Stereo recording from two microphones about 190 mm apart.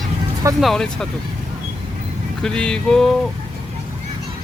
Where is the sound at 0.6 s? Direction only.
Centre (ahead or behind).